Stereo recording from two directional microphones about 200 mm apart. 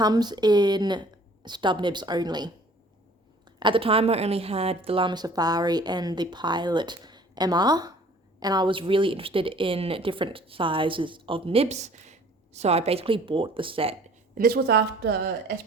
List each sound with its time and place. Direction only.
0.0 s a woman's voice: 20° right (ahead or behind)
3.6 s a woman's voice: 25° right (ahead or behind)
14.3 s speech: 50° right (ahead or behind)